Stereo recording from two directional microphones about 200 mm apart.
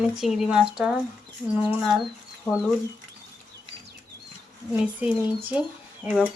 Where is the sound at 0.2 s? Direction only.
Centre (ahead or behind).